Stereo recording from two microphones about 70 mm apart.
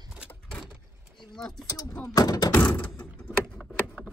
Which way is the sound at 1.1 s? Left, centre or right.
Centre.